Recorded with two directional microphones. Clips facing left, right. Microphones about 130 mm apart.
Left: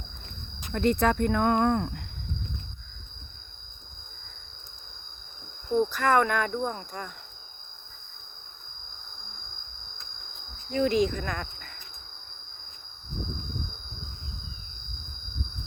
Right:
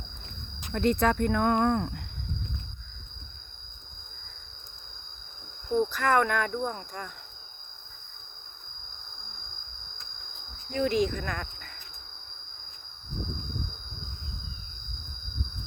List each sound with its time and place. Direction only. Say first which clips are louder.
0.7 s speech: left 1 dB; centre (ahead or behind)
5.8 s speech: left 1 dB; 10° left (ahead or behind)
10.8 s speech: left 2 dB; 20° left (ahead or behind)